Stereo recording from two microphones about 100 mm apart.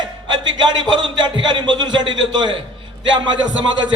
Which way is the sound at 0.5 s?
50° right (ahead or behind).